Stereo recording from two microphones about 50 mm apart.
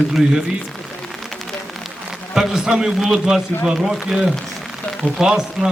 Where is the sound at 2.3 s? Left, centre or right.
Centre.